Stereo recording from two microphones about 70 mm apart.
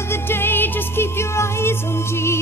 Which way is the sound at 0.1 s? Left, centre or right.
Left.